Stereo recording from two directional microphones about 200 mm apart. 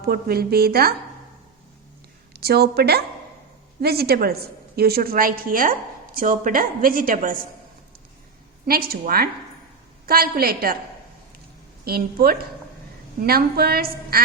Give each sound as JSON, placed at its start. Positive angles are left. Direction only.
{"t": 0.0, "sound": "a woman's voice", "side_deg": -50}
{"t": 2.3, "sound": "a woman's voice", "side_deg": -55}
{"t": 8.6, "sound": "a woman's voice", "side_deg": -50}
{"t": 11.9, "sound": "a woman's voice", "side_deg": -50}